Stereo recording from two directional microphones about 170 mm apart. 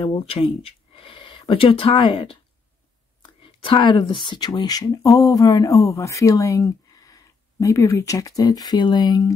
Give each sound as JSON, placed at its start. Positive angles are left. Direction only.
{"t": 0.0, "sound": "speech", "side_deg": 35}
{"t": 3.4, "sound": "speech", "side_deg": 30}